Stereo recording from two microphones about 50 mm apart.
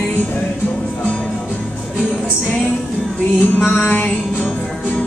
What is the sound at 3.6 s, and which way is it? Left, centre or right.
Music, left.